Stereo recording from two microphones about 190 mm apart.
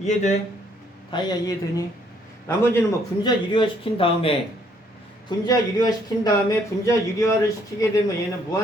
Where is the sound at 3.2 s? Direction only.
25° left (ahead or behind).